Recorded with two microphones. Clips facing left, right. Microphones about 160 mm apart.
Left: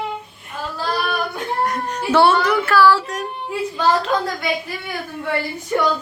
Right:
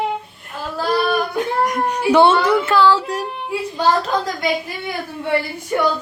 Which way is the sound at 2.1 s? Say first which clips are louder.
Right 2 dB; 20° right (ahead or behind).